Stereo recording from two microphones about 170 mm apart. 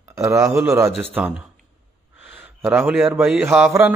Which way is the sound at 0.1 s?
20° right (ahead or behind).